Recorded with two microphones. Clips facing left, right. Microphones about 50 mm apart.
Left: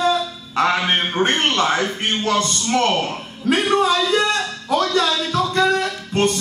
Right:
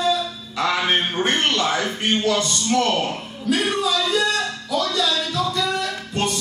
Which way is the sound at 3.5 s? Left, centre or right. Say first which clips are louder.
Left 4 dB; left.